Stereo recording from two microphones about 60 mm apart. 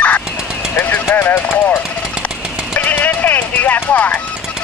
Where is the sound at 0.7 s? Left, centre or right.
Left.